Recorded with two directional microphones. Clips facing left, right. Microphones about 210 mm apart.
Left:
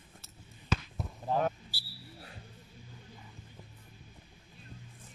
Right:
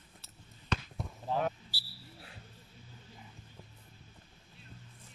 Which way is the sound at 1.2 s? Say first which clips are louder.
Left 2 dB; 45° left (ahead or behind).